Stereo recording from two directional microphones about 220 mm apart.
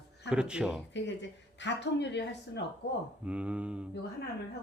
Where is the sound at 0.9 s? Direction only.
55° left (ahead or behind).